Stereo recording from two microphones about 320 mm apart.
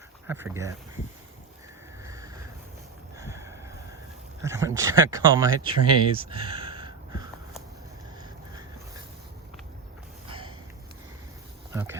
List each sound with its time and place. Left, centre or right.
0.3 s speech: centre
2.0 s a sound: centre
4.4 s speech: centre
10.2 s sniff: centre
11.7 s dog: centre